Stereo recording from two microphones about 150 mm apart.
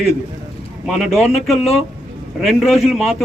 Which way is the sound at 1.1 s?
45° left (ahead or behind).